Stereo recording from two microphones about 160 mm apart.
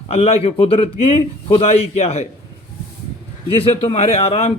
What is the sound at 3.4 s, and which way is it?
A man's voice, 35° left (ahead or behind).